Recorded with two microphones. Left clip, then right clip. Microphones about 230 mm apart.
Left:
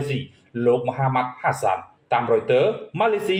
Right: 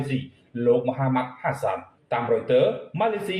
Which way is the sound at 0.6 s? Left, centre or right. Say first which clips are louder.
Left 1 dB; left.